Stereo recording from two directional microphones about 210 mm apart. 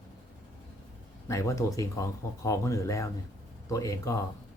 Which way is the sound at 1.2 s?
15° left (ahead or behind).